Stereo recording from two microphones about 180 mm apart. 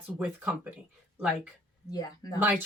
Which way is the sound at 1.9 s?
20° left (ahead or behind).